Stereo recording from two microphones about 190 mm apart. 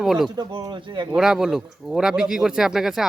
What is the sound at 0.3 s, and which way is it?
Speech, 25° right (ahead or behind).